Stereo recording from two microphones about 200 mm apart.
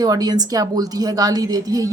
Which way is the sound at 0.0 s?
20° right (ahead or behind).